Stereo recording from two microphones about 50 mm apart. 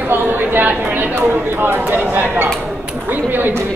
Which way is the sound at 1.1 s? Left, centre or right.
Right.